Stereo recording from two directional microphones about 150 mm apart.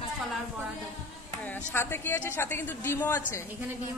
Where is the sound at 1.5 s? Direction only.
15° left (ahead or behind).